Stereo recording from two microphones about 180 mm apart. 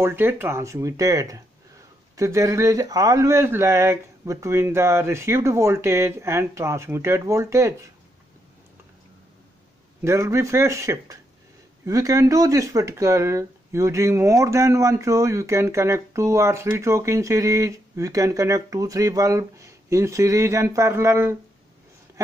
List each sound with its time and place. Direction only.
0.0 s speech: 10° right (ahead or behind)
10.0 s speech: 15° right (ahead or behind)